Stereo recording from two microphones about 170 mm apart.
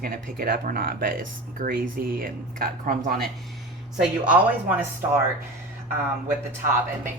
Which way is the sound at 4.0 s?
10° right (ahead or behind).